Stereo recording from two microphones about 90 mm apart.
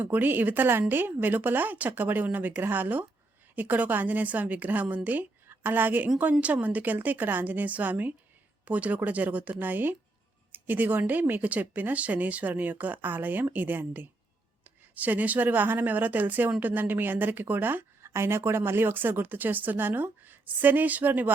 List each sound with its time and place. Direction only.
0.0 s a woman's voice: 20° right (ahead or behind)